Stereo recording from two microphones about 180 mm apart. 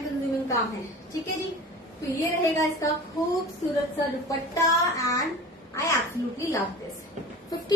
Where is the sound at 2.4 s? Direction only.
15° left (ahead or behind).